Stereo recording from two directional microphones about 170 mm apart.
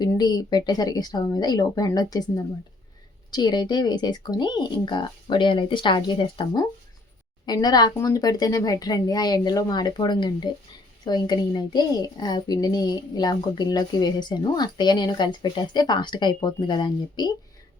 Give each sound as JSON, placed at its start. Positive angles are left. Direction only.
{"t": 0.0, "sound": "a woman's voice", "side_deg": 25}